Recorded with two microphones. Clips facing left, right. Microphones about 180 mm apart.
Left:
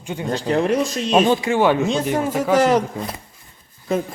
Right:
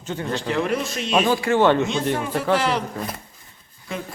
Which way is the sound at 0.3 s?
40° left (ahead or behind).